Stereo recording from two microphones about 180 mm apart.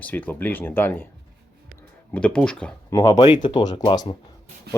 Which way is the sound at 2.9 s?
15° left (ahead or behind).